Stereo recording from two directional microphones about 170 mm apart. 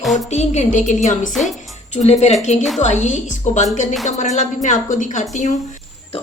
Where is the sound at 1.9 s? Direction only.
40° left (ahead or behind).